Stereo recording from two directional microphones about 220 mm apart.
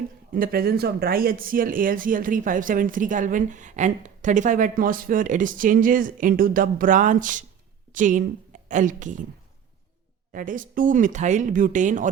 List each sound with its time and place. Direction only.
0.3 s a woman's voice: 40° right (ahead or behind)
10.3 s speech: 35° right (ahead or behind)